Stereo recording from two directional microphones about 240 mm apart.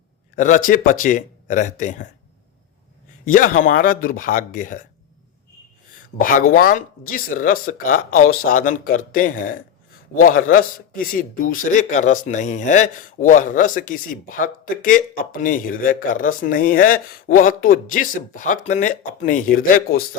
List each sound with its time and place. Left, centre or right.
0.3 s speech: left
3.2 s speech: left
6.1 s speech: left